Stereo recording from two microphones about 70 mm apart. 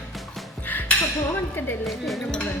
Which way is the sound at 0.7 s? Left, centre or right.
Left.